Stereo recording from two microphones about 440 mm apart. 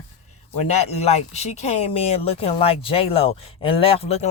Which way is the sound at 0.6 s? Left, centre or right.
Centre.